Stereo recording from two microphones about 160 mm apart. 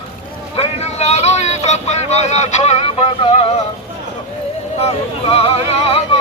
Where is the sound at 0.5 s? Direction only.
40° left (ahead or behind).